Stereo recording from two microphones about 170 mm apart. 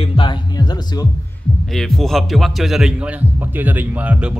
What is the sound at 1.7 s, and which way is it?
A man's voice, 5° left (ahead or behind).